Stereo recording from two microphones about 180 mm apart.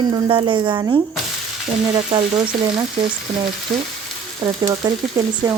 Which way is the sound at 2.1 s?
30° right (ahead or behind).